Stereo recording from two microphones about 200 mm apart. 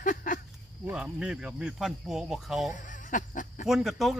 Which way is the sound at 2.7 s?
40° left (ahead or behind).